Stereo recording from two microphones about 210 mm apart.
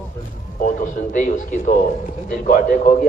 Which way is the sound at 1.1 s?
40° left (ahead or behind).